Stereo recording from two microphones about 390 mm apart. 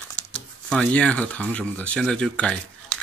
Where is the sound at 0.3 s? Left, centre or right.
Centre.